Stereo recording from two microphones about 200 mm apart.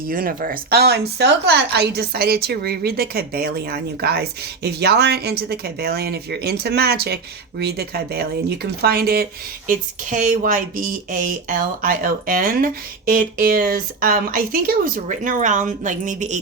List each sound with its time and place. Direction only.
0.1 s a woman's voice: 45° right (ahead or behind)
9.6 s a woman's voice: 40° right (ahead or behind)